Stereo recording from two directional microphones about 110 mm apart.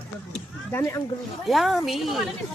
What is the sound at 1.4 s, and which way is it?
Speech, centre (ahead or behind).